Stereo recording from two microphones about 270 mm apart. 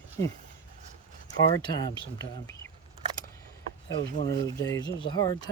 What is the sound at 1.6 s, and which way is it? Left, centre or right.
Speech, centre.